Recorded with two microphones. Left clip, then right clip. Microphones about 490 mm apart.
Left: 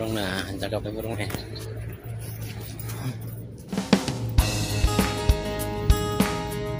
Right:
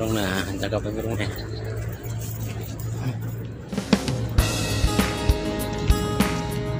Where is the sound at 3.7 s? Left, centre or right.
Centre.